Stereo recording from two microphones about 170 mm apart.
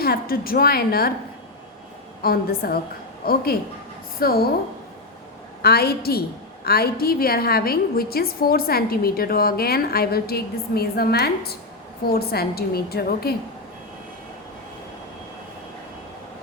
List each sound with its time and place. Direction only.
0.0 s a woman's voice: 60° left (ahead or behind)
2.2 s a woman's voice: 60° left (ahead or behind)
5.6 s a woman's voice: 65° left (ahead or behind)